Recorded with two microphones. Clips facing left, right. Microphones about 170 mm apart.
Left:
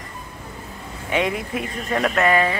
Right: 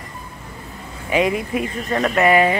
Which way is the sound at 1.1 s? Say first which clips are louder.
Right 4 dB; centre (ahead or behind).